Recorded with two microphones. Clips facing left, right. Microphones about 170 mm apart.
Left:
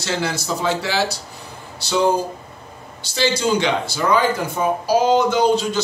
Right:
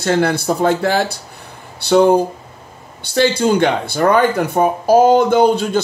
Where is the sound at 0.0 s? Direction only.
55° right (ahead or behind).